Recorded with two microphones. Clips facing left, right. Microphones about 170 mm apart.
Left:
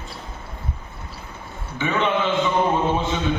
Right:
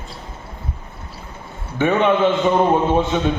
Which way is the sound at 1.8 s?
55° right (ahead or behind).